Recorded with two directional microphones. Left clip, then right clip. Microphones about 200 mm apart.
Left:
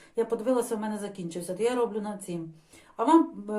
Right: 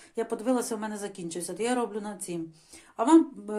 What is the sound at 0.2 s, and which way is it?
Speech, 35° right (ahead or behind).